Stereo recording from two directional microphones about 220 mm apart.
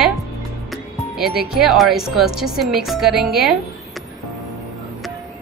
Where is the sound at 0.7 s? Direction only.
Centre (ahead or behind).